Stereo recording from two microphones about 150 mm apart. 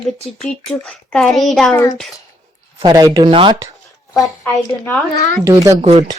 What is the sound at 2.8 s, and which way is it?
Speech, 25° right (ahead or behind).